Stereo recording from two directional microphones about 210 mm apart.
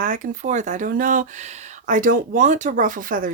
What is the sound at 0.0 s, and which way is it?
Speech, 40° right (ahead or behind).